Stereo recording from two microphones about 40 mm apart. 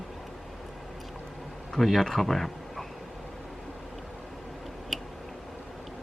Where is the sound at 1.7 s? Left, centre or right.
Centre.